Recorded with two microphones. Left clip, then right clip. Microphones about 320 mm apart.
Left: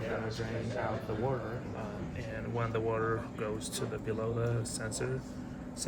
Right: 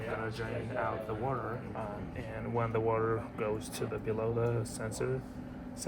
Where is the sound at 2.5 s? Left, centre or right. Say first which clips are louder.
Right 2 dB; centre.